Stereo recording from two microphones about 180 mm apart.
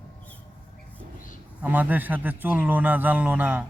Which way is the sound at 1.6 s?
10° right (ahead or behind).